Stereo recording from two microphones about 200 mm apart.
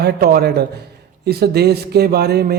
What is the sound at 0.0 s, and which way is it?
Speech, 50° right (ahead or behind).